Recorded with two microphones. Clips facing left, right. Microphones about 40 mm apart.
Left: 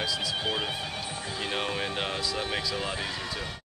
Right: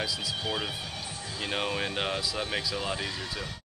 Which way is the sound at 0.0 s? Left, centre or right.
Centre.